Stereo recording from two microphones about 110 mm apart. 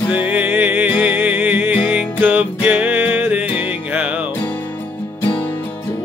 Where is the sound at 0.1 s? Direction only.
15° right (ahead or behind).